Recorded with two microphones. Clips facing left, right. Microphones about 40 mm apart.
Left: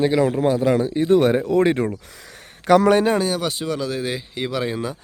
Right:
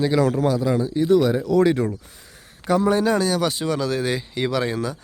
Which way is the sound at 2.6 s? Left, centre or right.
Left.